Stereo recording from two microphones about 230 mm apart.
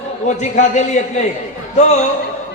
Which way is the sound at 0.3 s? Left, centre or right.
Left.